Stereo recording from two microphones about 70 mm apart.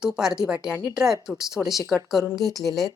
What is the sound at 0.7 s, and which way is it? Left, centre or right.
Speech, right.